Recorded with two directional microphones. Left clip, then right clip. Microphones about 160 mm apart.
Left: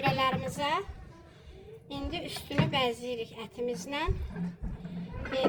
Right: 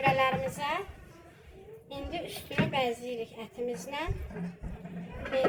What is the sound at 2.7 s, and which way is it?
A woman's voice, 50° left (ahead or behind).